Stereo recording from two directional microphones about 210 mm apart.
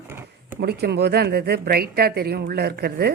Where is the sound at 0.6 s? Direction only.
50° right (ahead or behind).